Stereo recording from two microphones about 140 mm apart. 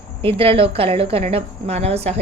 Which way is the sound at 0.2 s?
40° right (ahead or behind).